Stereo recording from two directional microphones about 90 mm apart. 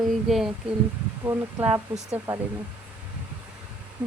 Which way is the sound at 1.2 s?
30° right (ahead or behind).